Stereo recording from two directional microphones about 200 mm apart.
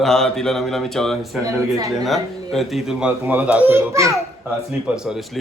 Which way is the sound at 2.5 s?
Centre (ahead or behind).